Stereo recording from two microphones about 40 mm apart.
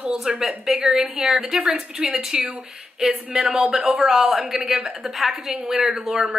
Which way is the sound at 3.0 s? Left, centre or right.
Centre.